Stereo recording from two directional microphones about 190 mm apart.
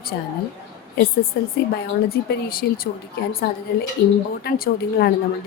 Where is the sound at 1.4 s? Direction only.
55° left (ahead or behind).